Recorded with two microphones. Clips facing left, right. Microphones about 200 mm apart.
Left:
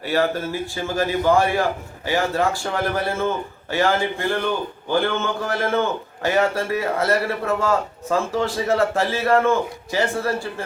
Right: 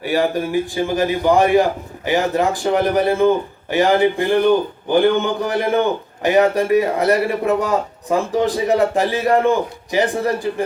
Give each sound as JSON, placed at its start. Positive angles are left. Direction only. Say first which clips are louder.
{"t": 0.0, "sound": "a man's voice", "louder": "right 3 dB", "side_deg": -15}